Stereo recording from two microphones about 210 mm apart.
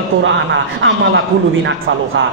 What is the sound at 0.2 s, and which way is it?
A man's voice, 60° right (ahead or behind).